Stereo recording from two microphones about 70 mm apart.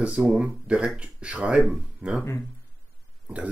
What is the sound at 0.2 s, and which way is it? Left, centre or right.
Speech, centre.